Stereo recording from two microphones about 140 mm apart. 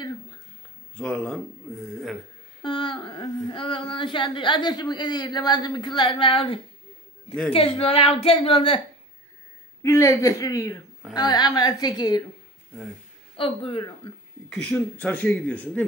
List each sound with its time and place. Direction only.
0.9 s speech: 5° left (ahead or behind)
2.6 s a sound: 35° left (ahead or behind)
3.4 s a woman's voice: 35° left (ahead or behind)
9.8 s a woman's voice: 20° left (ahead or behind)
13.4 s a woman's voice: 40° left (ahead or behind)
14.5 s speech: 10° left (ahead or behind)